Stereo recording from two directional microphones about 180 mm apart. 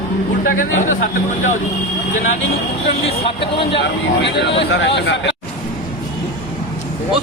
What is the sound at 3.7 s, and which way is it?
Speech, 75° left (ahead or behind).